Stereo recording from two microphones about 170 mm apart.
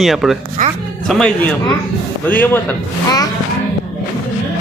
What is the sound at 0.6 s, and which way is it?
Speech, 50° right (ahead or behind).